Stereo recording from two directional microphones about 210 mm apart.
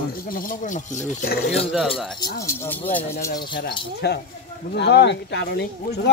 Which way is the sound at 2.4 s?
10° left (ahead or behind).